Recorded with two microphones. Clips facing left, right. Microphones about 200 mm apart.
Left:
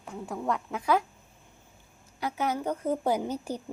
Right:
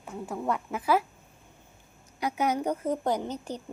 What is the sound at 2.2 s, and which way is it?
Speech, 15° right (ahead or behind).